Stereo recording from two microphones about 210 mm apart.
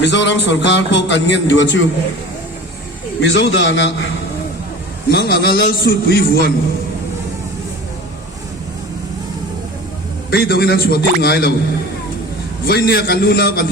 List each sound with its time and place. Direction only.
0.0 s a man's voice: 55° left (ahead or behind)
3.2 s a man's voice: 60° left (ahead or behind)
5.1 s a man's voice: 45° left (ahead or behind)
10.3 s a man's voice: 50° left (ahead or behind)
12.6 s a man's voice: 45° left (ahead or behind)